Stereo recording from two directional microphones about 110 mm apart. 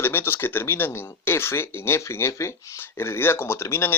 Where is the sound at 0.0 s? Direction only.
20° left (ahead or behind).